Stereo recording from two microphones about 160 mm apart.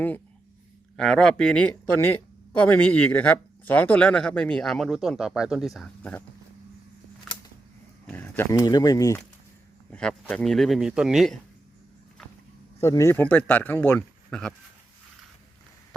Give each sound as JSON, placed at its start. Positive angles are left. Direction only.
{"t": 0.9, "sound": "speech", "side_deg": 5}
{"t": 6.0, "sound": "speech", "side_deg": 10}
{"t": 8.0, "sound": "speech", "side_deg": 10}
{"t": 9.9, "sound": "speech", "side_deg": 5}
{"t": 12.8, "sound": "speech", "side_deg": 20}